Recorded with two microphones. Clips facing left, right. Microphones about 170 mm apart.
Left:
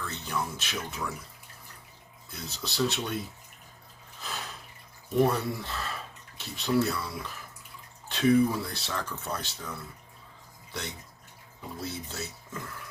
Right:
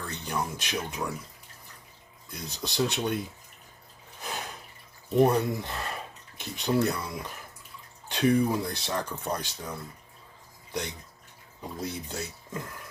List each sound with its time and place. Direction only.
0.3 s speech: 15° right (ahead or behind)
2.3 s speech: 15° right (ahead or behind)
4.2 s a sound: 15° right (ahead or behind)
5.1 s speech: 20° right (ahead or behind)